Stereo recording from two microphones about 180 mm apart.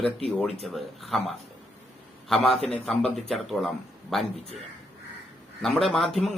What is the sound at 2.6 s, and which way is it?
Speech, 5° left (ahead or behind).